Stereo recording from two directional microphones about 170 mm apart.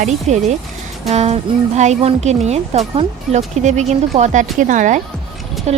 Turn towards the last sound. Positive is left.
turn(degrees=-40)  # may be behind; listen again after turning